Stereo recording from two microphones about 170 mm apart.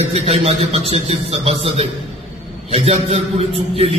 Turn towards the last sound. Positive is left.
turn(degrees=-35)  # may be behind; listen again after turning